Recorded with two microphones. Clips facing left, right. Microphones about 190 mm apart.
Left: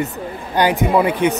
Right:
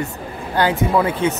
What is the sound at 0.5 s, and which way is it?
Speech, 15° left (ahead or behind).